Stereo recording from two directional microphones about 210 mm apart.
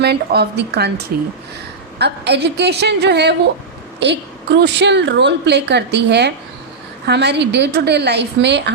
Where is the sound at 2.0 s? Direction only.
55° right (ahead or behind).